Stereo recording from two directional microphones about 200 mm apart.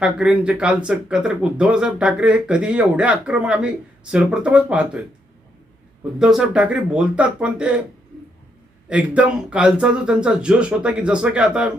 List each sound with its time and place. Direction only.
0.0 s speech: 5° right (ahead or behind)
6.1 s speech: centre (ahead or behind)
8.9 s speech: 5° right (ahead or behind)